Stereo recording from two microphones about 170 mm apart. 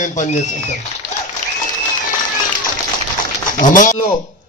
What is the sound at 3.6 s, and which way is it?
Speech, 50° left (ahead or behind).